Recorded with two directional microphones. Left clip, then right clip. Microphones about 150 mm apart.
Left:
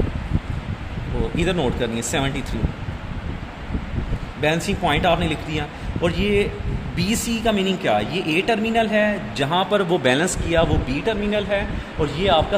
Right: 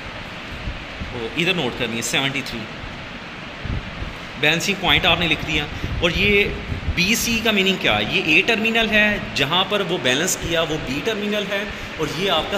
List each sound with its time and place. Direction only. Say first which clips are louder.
1.3 s speech: right 2 dB; 80° left
4.4 s speech: right 2 dB; 60° left (ahead or behind)